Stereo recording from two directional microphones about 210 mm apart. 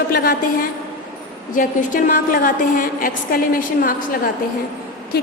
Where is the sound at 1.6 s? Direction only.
40° left (ahead or behind).